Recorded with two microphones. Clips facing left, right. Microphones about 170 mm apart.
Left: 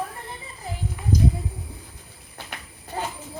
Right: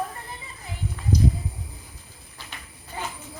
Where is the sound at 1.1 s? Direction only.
50° left (ahead or behind).